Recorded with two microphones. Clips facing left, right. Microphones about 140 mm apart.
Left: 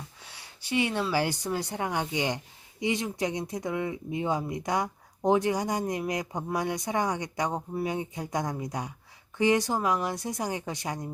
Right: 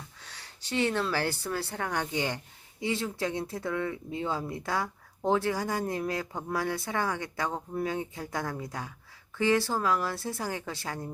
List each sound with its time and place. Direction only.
0.3 s speech: 10° left (ahead or behind)